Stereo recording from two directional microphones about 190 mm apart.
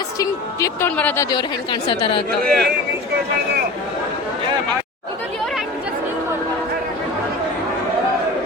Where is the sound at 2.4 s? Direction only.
55° right (ahead or behind).